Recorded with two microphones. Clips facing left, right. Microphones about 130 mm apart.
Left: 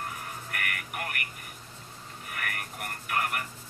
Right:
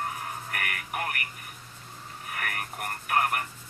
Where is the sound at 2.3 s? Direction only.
40° right (ahead or behind).